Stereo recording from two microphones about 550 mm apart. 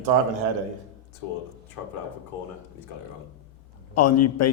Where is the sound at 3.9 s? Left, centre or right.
Left.